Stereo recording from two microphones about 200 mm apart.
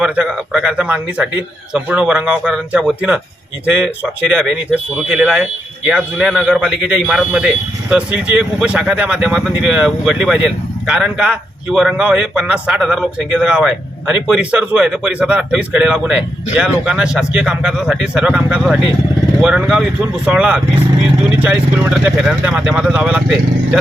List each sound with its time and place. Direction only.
0.0 s speech: 5° right (ahead or behind)